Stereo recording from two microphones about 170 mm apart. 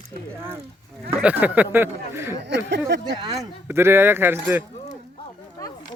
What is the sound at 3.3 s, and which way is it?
Speech, 15° right (ahead or behind).